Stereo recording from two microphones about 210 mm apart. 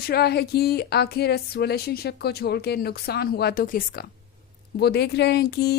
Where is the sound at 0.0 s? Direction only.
50° left (ahead or behind).